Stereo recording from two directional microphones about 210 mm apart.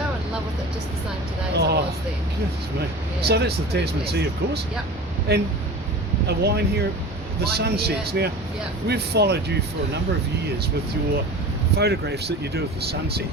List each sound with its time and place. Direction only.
1.5 s vehicle: 50° right (ahead or behind)
3.2 s speech: 50° right (ahead or behind)
11.8 s speech: 50° right (ahead or behind)